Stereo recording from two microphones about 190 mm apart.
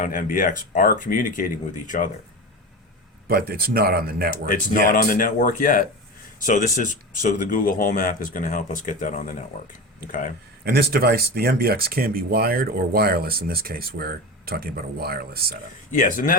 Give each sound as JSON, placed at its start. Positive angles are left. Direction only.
{"t": 0.0, "sound": "speech", "side_deg": 45}
{"t": 3.2, "sound": "speech", "side_deg": -55}
{"t": 4.9, "sound": "speech", "side_deg": 45}
{"t": 10.6, "sound": "speech", "side_deg": -55}
{"t": 15.9, "sound": "speech", "side_deg": 45}